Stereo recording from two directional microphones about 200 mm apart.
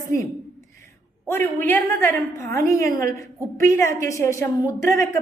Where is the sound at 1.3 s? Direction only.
10° left (ahead or behind).